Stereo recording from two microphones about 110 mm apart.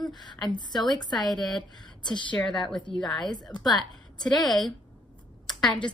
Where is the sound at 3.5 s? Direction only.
35° left (ahead or behind).